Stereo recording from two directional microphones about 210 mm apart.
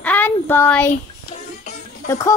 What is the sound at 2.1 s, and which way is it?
Speech, 15° left (ahead or behind).